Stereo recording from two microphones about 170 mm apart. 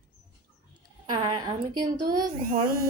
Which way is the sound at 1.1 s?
25° right (ahead or behind).